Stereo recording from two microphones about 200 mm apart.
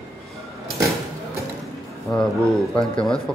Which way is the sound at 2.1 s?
20° left (ahead or behind).